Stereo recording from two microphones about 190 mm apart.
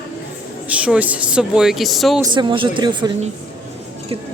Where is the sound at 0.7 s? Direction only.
5° right (ahead or behind).